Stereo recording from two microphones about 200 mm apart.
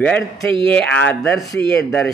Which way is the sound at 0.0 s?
5° left (ahead or behind).